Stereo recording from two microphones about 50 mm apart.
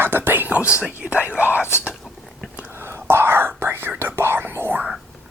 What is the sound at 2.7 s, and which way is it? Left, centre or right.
Whispering, right.